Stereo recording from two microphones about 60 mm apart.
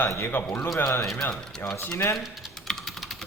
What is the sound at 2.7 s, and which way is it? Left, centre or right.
Typing, centre.